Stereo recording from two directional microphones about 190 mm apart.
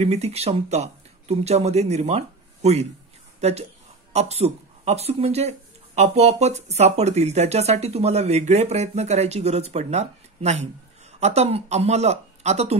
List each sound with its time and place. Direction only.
0.0 s speech: 35° right (ahead or behind)